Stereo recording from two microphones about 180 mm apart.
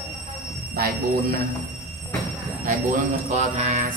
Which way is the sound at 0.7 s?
55° right (ahead or behind).